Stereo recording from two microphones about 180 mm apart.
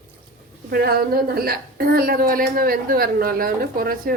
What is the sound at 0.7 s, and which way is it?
A woman's voice, 60° right (ahead or behind).